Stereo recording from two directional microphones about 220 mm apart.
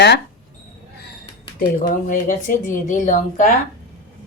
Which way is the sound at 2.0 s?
40° left (ahead or behind).